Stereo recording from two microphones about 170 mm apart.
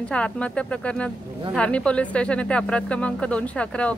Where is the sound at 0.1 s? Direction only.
5° left (ahead or behind).